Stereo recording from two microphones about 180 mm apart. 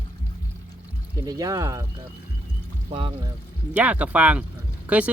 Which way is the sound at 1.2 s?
20° right (ahead or behind).